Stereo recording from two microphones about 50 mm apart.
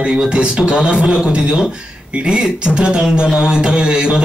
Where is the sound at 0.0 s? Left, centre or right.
Centre.